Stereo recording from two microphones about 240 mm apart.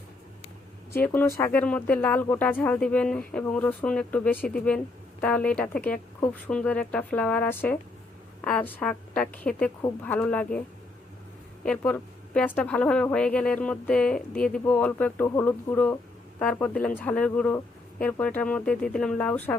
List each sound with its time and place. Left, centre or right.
0.9 s speech: centre
11.6 s speech: centre